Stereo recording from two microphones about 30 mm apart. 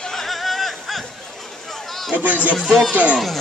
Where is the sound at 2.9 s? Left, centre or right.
Right.